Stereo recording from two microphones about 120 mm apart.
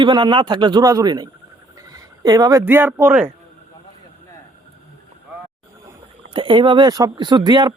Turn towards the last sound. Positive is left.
turn(degrees=-35)  # may be behind; listen again after turning